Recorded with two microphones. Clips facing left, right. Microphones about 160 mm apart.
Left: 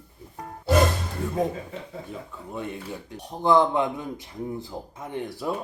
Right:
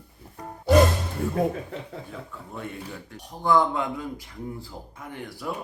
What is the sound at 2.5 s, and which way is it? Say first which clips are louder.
A man's voice: left 3 dB; 20° left (ahead or behind).